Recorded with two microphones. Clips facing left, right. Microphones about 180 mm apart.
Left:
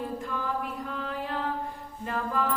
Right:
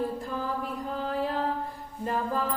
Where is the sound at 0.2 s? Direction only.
35° right (ahead or behind).